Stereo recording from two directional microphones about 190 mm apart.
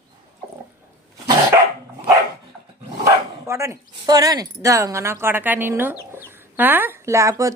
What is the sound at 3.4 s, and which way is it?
Speech, 15° right (ahead or behind).